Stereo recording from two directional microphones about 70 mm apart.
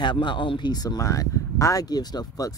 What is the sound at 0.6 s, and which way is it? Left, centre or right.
Speech, left.